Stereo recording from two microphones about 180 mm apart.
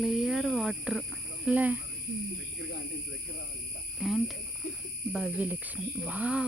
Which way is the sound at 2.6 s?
70° left (ahead or behind).